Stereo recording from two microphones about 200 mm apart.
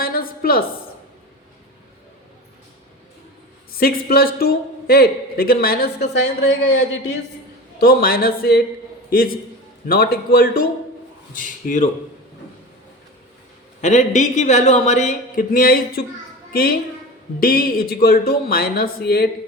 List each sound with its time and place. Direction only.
0.0 s a sound: 45° left (ahead or behind)
3.8 s a man's voice: 50° left (ahead or behind)
13.8 s a man's voice: 35° left (ahead or behind)